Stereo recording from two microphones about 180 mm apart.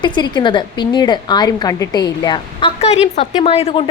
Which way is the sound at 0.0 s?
25° left (ahead or behind).